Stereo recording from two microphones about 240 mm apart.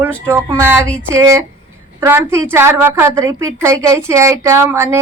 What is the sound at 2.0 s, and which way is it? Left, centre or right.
A woman's voice, centre.